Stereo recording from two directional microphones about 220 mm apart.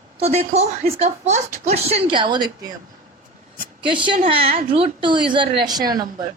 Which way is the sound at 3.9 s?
20° right (ahead or behind).